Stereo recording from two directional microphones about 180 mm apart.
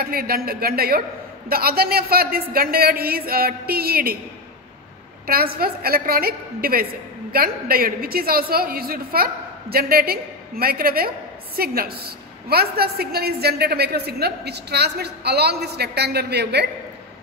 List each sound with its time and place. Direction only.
0.0 s a woman's voice: 55° right (ahead or behind)
5.2 s a woman's voice: 55° right (ahead or behind)